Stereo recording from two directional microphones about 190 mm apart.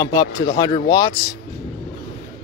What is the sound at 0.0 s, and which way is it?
Speech, 20° left (ahead or behind).